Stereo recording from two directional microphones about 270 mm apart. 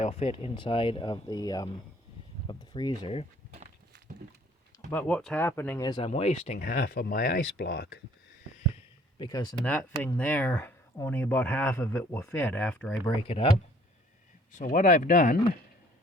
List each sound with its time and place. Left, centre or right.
0.0 s speech: left
4.9 s speech: centre; by 8.0 s left
9.1 s speech: centre
13.2 s speech: left
14.5 s speech: left